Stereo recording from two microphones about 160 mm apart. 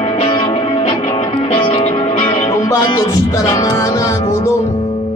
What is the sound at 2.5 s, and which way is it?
Music, 20° left (ahead or behind).